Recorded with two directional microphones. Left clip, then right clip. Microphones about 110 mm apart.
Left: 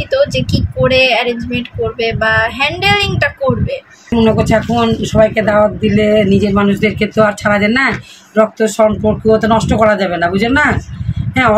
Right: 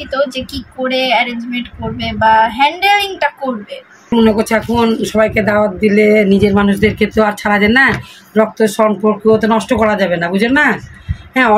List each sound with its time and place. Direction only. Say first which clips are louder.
0.1 s speech: left 3 dB; 30° left (ahead or behind)
4.1 s speech: even; 40° right (ahead or behind)
5.6 s a sound: even; 45° right (ahead or behind); by 6.7 s 30° right (ahead or behind)
6.8 s speech: left 1 dB; 15° right (ahead or behind)